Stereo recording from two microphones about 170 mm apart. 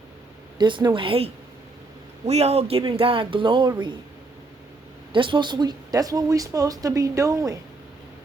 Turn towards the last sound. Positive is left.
turn(degrees=-20)  # may be behind; listen again after turning